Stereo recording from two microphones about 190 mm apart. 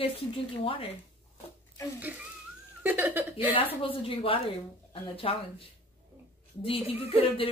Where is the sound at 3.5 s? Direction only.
30° left (ahead or behind).